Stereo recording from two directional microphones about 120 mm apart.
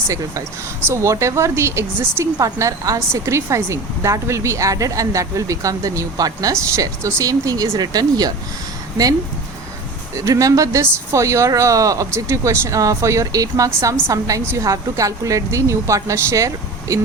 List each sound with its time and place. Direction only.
0.1 s a woman's voice: 25° right (ahead or behind)
10.2 s a woman's voice: 30° right (ahead or behind)